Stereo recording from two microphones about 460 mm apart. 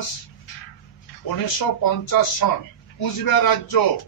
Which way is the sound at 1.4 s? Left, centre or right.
Left.